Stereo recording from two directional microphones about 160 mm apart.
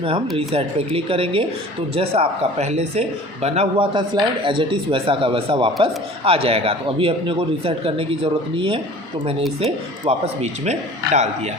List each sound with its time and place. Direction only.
0.3 s speech: 35° right (ahead or behind)